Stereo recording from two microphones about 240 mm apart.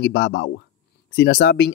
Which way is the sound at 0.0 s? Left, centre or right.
Left.